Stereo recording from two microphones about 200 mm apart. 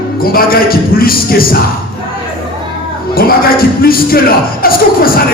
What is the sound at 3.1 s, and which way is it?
A man's voice, 50° left (ahead or behind).